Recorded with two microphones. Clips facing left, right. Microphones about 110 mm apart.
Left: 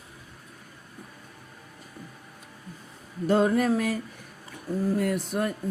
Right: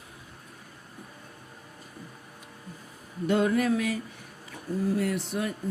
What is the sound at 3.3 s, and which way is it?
Speech, 35° left (ahead or behind).